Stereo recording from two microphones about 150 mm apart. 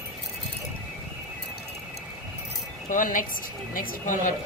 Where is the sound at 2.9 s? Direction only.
60° left (ahead or behind).